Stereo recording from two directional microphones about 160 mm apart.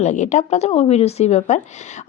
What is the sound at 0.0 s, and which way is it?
Speech, 45° left (ahead or behind).